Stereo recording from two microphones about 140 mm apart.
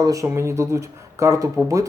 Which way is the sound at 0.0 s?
25° right (ahead or behind).